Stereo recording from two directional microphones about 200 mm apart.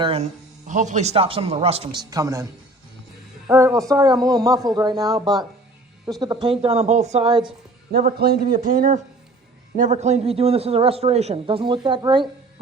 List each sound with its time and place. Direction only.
0.0 s a man's voice: 30° right (ahead or behind)
7.9 s a man's voice: 50° right (ahead or behind); by 12.3 s 25° right (ahead or behind)